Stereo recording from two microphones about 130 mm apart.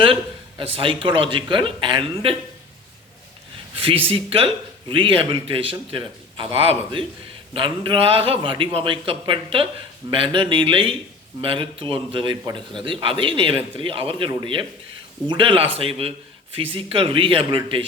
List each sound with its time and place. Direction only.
0.6 s a man's voice: 45° right (ahead or behind)
3.8 s a man's voice: 45° right (ahead or behind)